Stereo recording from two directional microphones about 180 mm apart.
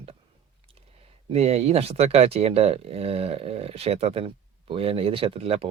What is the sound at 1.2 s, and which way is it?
Speech, 35° right (ahead or behind).